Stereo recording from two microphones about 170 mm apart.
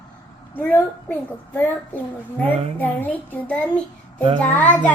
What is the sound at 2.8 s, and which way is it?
A woman's voice, 10° left (ahead or behind).